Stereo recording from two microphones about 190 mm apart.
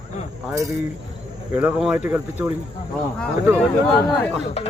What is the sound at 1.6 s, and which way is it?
Speech, 5° right (ahead or behind).